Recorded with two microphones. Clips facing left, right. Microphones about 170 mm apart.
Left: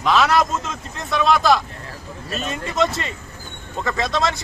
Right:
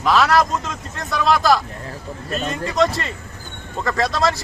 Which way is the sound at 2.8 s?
Centre (ahead or behind).